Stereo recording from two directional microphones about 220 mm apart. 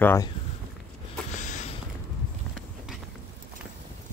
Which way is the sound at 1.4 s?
35° left (ahead or behind).